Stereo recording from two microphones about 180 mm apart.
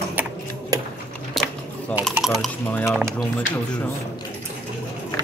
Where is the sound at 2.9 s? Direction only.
5° right (ahead or behind).